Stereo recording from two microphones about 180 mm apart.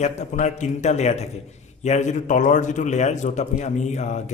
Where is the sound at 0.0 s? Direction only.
40° left (ahead or behind).